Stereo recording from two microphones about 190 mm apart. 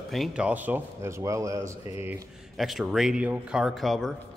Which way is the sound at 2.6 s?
Centre (ahead or behind).